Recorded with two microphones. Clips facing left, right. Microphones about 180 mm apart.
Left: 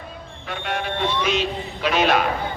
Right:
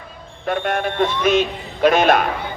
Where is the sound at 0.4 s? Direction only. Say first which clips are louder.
Right 7 dB; 50° right (ahead or behind).